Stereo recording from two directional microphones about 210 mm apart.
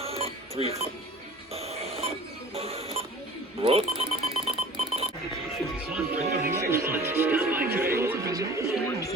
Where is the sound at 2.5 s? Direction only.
30° right (ahead or behind).